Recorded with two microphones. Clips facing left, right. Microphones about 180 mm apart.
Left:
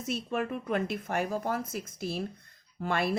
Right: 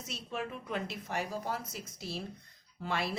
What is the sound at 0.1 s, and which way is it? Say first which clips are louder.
Speech: left 8 dB; 55° left (ahead or behind).